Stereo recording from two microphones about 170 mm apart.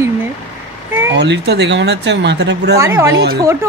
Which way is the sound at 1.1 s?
85° right.